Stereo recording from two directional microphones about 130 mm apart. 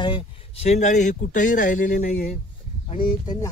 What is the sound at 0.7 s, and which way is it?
Speech, 65° left (ahead or behind).